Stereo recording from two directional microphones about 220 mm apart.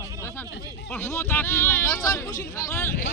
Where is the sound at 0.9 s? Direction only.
10° left (ahead or behind).